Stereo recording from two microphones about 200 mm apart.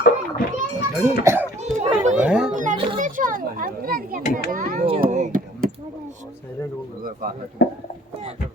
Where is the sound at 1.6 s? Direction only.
35° right (ahead or behind).